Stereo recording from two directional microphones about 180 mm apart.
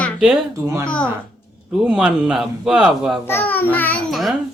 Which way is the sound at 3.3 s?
10° left (ahead or behind).